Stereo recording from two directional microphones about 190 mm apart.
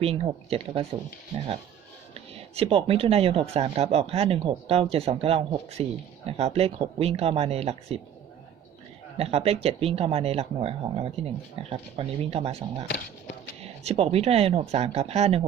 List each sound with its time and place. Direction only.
0.0 s speech: 30° right (ahead or behind)
2.1 s speech: 30° right (ahead or behind)
9.1 s speech: 30° right (ahead or behind)